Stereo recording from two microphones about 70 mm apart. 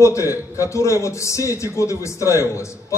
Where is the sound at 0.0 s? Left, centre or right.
Left.